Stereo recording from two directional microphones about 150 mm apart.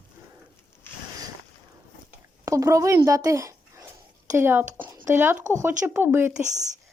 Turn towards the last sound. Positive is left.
turn(degrees=-55)  # may be behind; listen again after turning